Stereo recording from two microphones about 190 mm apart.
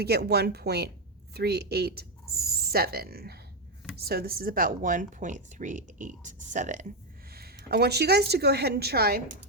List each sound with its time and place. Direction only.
0.0 s a woman's voice: 55° right (ahead or behind); by 6.8 s 40° right (ahead or behind)
7.3 s a woman's voice: 55° right (ahead or behind)